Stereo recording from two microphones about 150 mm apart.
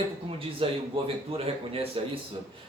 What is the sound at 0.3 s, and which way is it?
Speech, 40° right (ahead or behind).